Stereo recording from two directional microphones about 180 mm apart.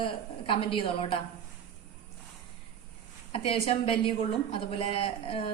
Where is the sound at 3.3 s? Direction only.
30° left (ahead or behind).